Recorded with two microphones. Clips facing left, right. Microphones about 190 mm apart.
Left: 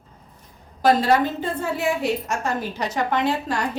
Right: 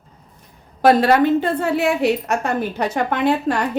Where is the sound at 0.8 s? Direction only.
65° right (ahead or behind).